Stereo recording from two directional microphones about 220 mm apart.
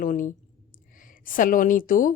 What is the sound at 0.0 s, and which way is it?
A woman's voice, 35° left (ahead or behind).